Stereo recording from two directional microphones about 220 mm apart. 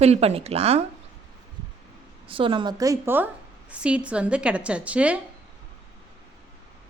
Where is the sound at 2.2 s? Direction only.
25° right (ahead or behind); by 5.2 s 5° right (ahead or behind).